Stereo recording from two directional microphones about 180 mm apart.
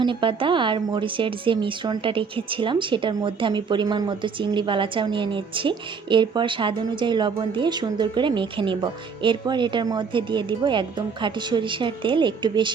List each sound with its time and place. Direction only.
0.0 s a woman's voice: 25° right (ahead or behind)